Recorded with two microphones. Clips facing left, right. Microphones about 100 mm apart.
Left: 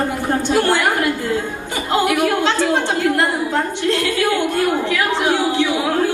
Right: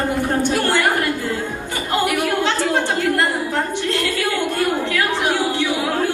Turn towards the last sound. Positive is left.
turn(degrees=20)  # may be behind; listen again after turning